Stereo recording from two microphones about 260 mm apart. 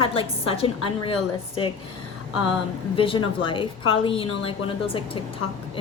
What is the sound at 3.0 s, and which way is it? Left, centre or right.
A woman's voice, centre.